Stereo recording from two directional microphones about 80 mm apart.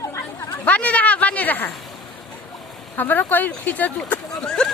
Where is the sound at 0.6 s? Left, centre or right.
Centre.